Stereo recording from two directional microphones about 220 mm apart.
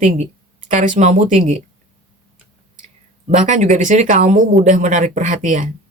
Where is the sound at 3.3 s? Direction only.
35° right (ahead or behind).